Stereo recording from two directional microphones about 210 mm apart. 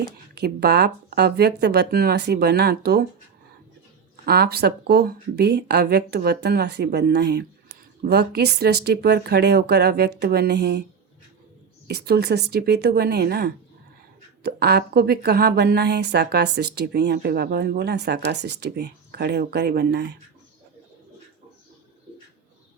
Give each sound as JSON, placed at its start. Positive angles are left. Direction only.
{"t": 0.0, "sound": "a woman's voice", "side_deg": -50}
{"t": 4.3, "sound": "a woman's voice", "side_deg": -50}
{"t": 11.9, "sound": "a woman's voice", "side_deg": -50}